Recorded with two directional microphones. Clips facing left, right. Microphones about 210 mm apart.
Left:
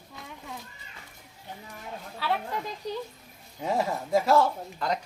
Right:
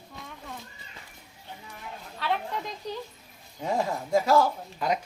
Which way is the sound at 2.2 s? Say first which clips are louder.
Even; 5° left (ahead or behind).